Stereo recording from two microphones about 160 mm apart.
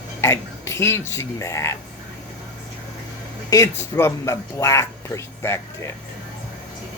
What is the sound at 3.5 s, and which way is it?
Speech, 15° left (ahead or behind).